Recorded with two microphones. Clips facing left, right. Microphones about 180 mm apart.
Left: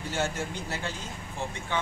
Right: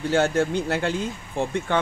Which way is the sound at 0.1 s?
70° right (ahead or behind).